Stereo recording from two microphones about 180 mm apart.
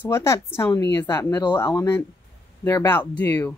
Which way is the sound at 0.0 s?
15° left (ahead or behind).